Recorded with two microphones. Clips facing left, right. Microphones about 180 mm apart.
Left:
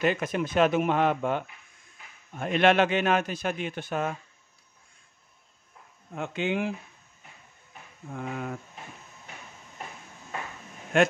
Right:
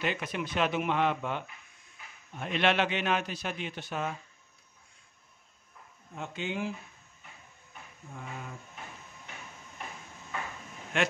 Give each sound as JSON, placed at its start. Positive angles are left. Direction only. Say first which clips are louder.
{"t": 0.0, "sound": "a man's voice", "louder": "left 7 dB", "side_deg": 45}
{"t": 6.1, "sound": "speech", "louder": "left 7 dB", "side_deg": 65}
{"t": 8.1, "sound": "a sound", "louder": "left 9 dB", "side_deg": 65}
{"t": 10.9, "sound": "a man's voice", "louder": "left 8 dB", "side_deg": 45}